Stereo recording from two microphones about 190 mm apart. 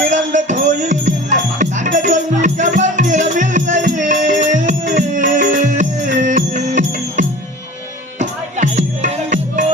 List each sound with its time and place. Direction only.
0.1 s music: 40° right (ahead or behind)